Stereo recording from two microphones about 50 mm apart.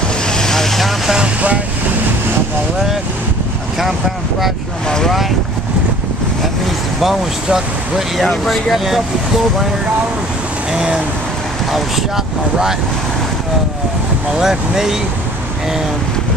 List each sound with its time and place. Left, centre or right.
0.3 s vehicle: centre
4.8 s speech: centre
7.4 s speech: centre
8.3 s speech: centre
8.7 s speech: centre
10.7 s speech: centre
14.4 s speech: centre